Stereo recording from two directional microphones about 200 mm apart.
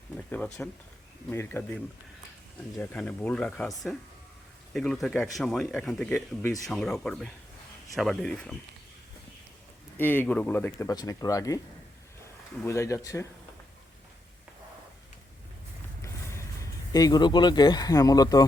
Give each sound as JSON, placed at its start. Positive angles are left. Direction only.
{"t": 0.2, "sound": "speech", "side_deg": 5}
{"t": 10.0, "sound": "speech", "side_deg": 10}
{"t": 12.6, "sound": "speech", "side_deg": 15}
{"t": 16.0, "sound": "speech", "side_deg": 15}